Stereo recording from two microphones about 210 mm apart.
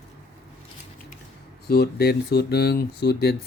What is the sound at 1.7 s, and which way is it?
Speech, 50° left (ahead or behind).